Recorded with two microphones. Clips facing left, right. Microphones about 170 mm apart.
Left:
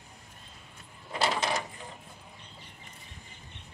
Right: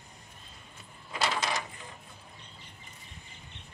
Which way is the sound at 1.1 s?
30° left (ahead or behind).